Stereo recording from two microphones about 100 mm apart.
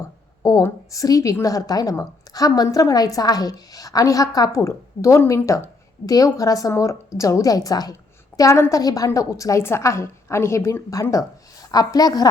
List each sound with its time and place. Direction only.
0.6 s a woman's voice: 35° left (ahead or behind)